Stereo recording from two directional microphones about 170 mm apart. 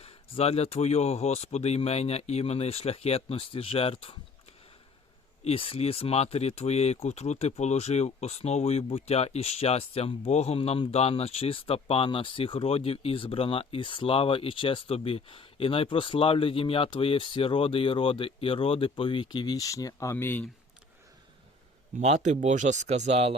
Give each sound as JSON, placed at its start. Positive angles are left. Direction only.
{"t": 0.0, "sound": "speech", "side_deg": 35}
{"t": 5.5, "sound": "speech", "side_deg": 35}
{"t": 21.9, "sound": "speech", "side_deg": -45}